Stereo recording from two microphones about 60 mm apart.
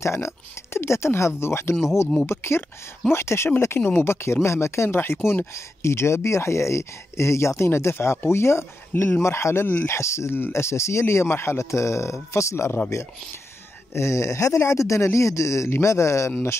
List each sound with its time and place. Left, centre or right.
0.0 s speech: left
13.9 s speech: left